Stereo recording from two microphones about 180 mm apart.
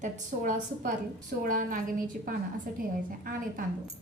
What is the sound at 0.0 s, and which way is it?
A woman's voice, 45° right (ahead or behind).